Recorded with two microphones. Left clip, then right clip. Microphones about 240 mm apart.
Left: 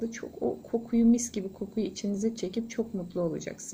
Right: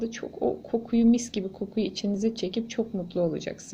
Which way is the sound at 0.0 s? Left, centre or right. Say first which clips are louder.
Right 4 dB; centre.